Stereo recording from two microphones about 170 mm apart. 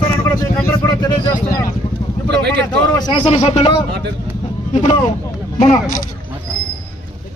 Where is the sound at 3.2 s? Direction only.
40° left (ahead or behind).